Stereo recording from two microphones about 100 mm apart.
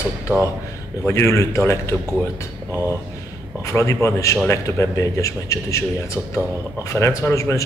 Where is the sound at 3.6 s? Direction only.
30° left (ahead or behind).